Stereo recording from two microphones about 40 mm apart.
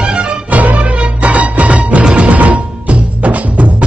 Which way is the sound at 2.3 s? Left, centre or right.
Right.